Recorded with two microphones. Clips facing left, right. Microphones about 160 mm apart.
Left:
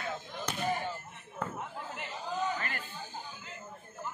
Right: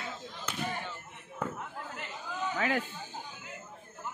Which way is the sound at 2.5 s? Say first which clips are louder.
Right 9 dB; 90° right.